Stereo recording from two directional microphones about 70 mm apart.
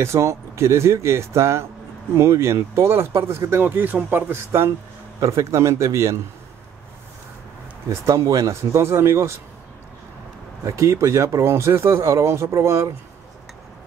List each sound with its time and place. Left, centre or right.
0.0 s speech: right
7.9 s speech: right
10.6 s speech: right